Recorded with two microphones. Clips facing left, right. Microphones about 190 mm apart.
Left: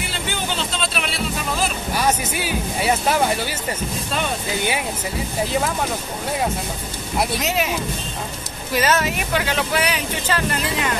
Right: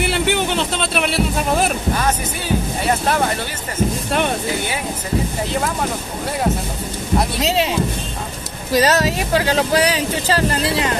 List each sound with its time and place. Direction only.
0.0 s music: 65° right (ahead or behind)
7.3 s speech: 30° right (ahead or behind)
8.7 s speech: 35° right (ahead or behind)